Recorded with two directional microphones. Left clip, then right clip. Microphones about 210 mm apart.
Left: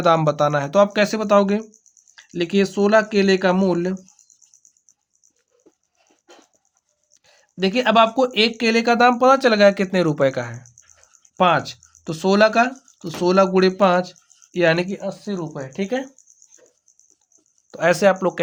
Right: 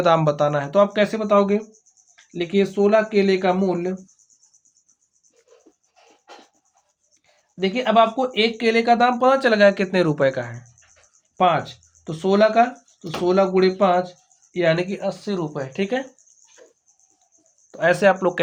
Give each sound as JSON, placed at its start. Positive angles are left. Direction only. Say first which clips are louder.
{"t": 0.0, "sound": "speech", "louder": "left 1 dB", "side_deg": 25}
{"t": 7.1, "sound": "a sound", "louder": "left 6 dB", "side_deg": 45}
{"t": 7.6, "sound": "speech", "louder": "left 1 dB", "side_deg": 45}
{"t": 14.8, "sound": "speech", "louder": "right 2 dB", "side_deg": 15}
{"t": 17.7, "sound": "speech", "louder": "even", "side_deg": 35}